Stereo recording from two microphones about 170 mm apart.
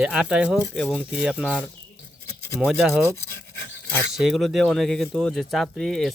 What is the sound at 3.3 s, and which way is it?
Dog, 90° left.